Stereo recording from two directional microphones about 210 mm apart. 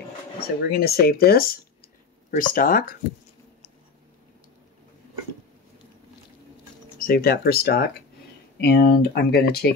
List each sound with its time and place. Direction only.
0.4 s speech: 50° left (ahead or behind)
7.0 s speech: 45° left (ahead or behind)